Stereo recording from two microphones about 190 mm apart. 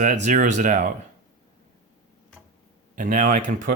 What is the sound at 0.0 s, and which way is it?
Speech, 45° right (ahead or behind).